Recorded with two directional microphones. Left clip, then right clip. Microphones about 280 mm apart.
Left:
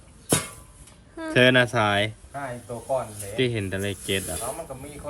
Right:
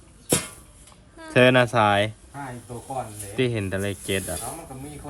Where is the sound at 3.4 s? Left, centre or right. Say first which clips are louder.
Right 1 dB; right.